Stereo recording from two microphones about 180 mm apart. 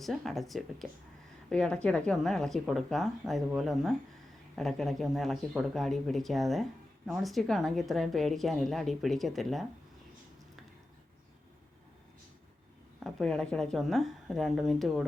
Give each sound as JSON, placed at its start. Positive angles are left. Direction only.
{"t": 0.0, "sound": "a woman's voice", "side_deg": 0}
{"t": 13.0, "sound": "a woman's voice", "side_deg": 0}